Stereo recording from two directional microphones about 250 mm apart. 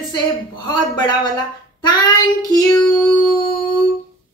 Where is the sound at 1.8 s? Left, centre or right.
Centre.